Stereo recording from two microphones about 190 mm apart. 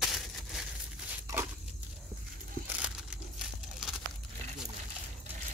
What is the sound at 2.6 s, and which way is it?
Crumpling, 5° right (ahead or behind).